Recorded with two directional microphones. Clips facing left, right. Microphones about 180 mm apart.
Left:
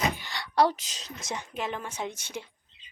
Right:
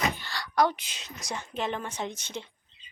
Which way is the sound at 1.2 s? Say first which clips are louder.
Left 1 dB; 20° left (ahead or behind).